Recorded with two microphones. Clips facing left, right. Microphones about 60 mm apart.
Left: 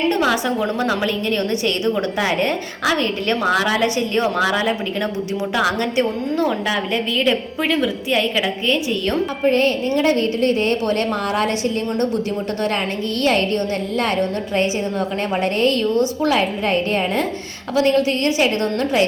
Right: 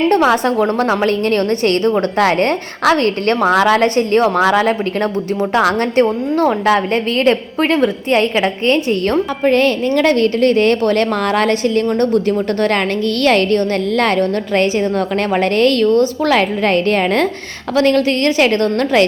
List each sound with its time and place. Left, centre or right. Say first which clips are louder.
0.1 s a woman's voice: right 6 dB; right
9.5 s a woman's voice: right 4 dB; right
13.2 s a woman's voice: right 5 dB; right